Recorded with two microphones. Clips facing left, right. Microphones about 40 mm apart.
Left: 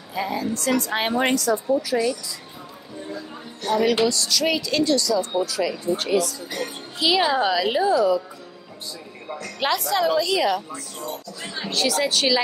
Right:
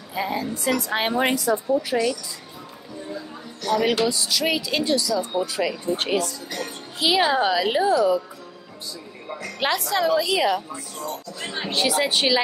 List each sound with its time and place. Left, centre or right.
0.1 s a woman's voice: centre
1.3 s a woman's voice: centre
1.9 s a woman's voice: centre
4.0 s a woman's voice: centre
5.4 s a woman's voice: right
5.9 s speech: right
7.0 s a woman's voice: centre
9.3 s a woman's voice: centre
11.4 s speech: right
11.8 s a woman's voice: centre